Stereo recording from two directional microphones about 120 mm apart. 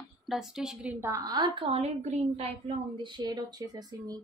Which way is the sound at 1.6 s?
55° right (ahead or behind).